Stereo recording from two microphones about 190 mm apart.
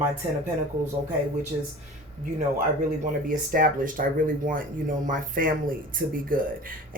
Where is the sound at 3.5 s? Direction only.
45° right (ahead or behind).